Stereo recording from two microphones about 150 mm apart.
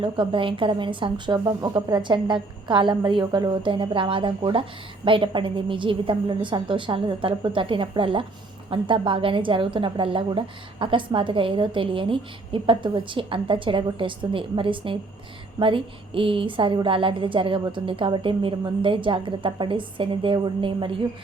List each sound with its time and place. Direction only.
0.0 s a woman's voice: 35° right (ahead or behind)